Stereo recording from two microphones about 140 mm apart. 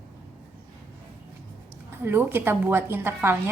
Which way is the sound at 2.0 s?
15° right (ahead or behind).